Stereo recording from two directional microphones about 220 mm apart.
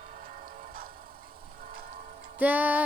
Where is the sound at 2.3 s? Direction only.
5° right (ahead or behind).